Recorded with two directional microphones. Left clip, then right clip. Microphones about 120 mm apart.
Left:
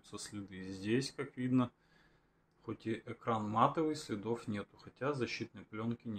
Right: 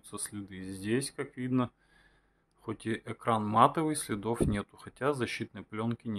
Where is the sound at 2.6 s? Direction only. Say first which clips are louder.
Right 5 dB; 50° right (ahead or behind).